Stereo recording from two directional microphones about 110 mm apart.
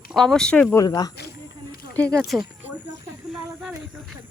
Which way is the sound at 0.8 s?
35° left (ahead or behind).